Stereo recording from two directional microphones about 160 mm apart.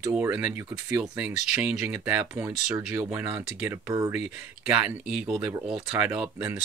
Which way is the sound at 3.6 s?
20° right (ahead or behind).